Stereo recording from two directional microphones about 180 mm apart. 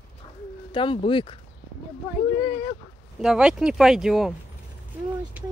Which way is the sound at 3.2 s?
5° right (ahead or behind).